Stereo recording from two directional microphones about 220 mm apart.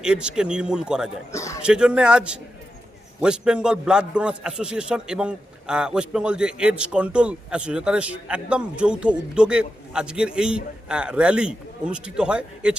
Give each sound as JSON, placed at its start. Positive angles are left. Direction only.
{"t": 0.0, "sound": "a man's voice", "side_deg": -5}
{"t": 1.3, "sound": "a man's voice", "side_deg": 15}
{"t": 1.6, "sound": "a man's voice", "side_deg": -5}